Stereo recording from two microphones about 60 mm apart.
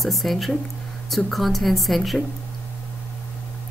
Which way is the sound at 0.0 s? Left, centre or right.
Centre.